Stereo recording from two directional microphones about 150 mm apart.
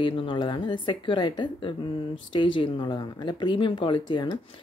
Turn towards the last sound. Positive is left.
turn(degrees=30)  # may be behind; listen again after turning